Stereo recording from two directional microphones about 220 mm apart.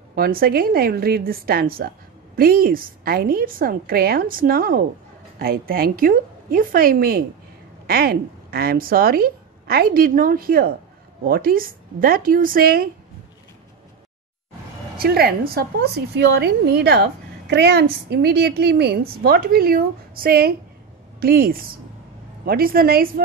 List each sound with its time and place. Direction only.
0.1 s a woman's voice: 45° right (ahead or behind)
15.0 s a woman's voice: 45° right (ahead or behind)